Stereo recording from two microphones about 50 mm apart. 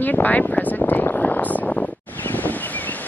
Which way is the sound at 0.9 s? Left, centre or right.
Left.